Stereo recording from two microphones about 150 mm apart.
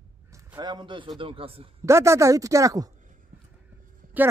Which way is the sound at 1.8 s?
20° right (ahead or behind).